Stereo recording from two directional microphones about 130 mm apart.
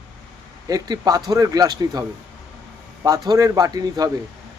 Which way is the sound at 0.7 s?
30° right (ahead or behind).